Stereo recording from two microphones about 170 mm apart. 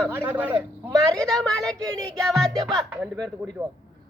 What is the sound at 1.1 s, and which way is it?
Speech, 5° left (ahead or behind).